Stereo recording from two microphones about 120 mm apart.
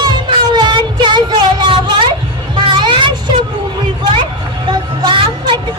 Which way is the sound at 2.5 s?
40° right (ahead or behind).